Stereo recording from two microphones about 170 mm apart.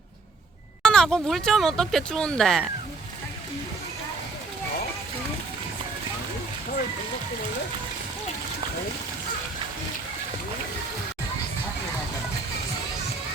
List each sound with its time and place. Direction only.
0.8 s speech: 5° left (ahead or behind)